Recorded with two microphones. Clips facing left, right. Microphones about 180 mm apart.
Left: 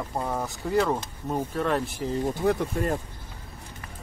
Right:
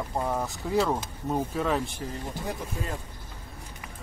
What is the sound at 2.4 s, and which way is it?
Speech, 65° left (ahead or behind).